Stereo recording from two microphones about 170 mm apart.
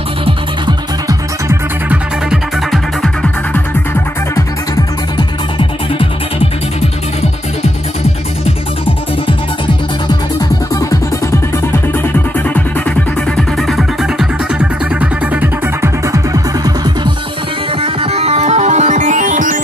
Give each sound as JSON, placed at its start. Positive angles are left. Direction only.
{"t": 0.7, "sound": "music", "side_deg": -20}
{"t": 1.9, "sound": "music", "side_deg": 0}
{"t": 5.1, "sound": "music", "side_deg": 30}
{"t": 13.7, "sound": "music", "side_deg": 0}
{"t": 16.6, "sound": "music", "side_deg": -25}
{"t": 17.8, "sound": "music", "side_deg": -35}